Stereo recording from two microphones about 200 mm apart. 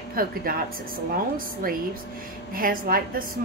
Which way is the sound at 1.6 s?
45° right (ahead or behind).